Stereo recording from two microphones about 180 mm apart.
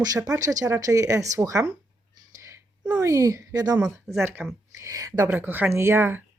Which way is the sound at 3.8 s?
15° right (ahead or behind).